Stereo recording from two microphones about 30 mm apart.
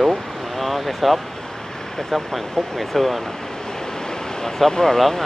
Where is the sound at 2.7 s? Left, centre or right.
Centre.